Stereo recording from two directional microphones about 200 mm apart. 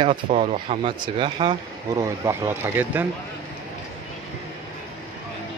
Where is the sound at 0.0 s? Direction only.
30° right (ahead or behind); by 3.1 s 10° right (ahead or behind).